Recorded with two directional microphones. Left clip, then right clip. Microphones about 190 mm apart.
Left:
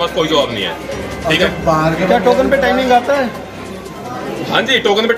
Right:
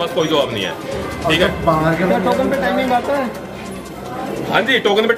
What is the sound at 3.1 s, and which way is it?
Speech, 45° left (ahead or behind).